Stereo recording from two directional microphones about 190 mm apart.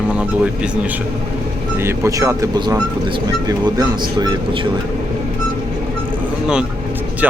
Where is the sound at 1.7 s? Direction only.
15° right (ahead or behind).